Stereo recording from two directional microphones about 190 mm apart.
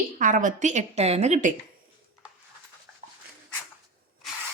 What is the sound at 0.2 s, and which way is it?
Speech, 40° right (ahead or behind).